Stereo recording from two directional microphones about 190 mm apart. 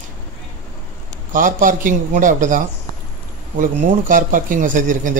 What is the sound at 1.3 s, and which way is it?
A man's voice, 45° right (ahead or behind).